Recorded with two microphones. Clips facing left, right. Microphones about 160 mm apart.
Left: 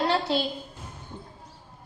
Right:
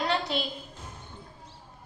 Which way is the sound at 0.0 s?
30° left (ahead or behind).